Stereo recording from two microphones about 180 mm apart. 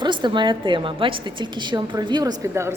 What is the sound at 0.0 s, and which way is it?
A woman's voice, 25° right (ahead or behind).